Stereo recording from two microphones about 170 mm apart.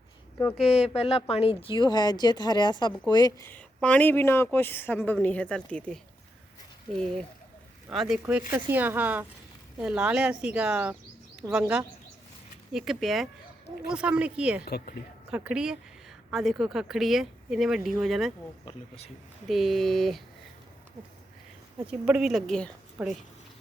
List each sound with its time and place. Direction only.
0.5 s speech: centre (ahead or behind)
0.8 s speech: 35° left (ahead or behind)
3.4 s speech: 10° left (ahead or behind)
7.9 s speech: centre (ahead or behind)
14.6 s speech: 65° left (ahead or behind)
15.3 s speech: 5° right (ahead or behind)
18.6 s speech: 40° left (ahead or behind)
19.5 s speech: centre (ahead or behind)
21.8 s speech: 5° right (ahead or behind)
23.0 s speech: 10° right (ahead or behind)